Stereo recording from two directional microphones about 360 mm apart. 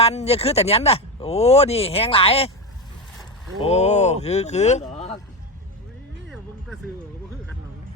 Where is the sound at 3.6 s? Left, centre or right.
Centre.